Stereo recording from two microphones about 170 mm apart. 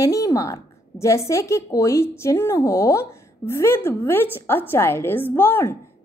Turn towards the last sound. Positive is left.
turn(degrees=15)  # may be behind; listen again after turning